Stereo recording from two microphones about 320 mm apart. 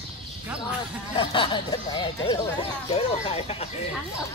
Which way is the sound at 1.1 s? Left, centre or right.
Centre.